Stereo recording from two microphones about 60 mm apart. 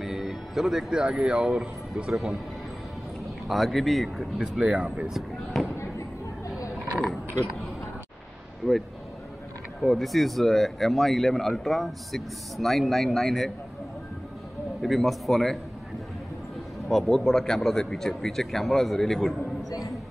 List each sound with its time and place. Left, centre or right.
0.0 s speech: centre
3.4 s speech: centre
4.6 s speech: right
5.1 s basketball bounce: centre
9.8 s speech: centre
14.8 s speech: centre
16.9 s speech: centre